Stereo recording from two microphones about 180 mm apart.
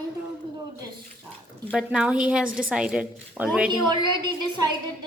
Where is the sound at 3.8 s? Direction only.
25° right (ahead or behind).